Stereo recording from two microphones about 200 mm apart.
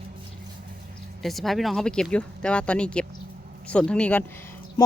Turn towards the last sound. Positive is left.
turn(degrees=10)  # may be behind; listen again after turning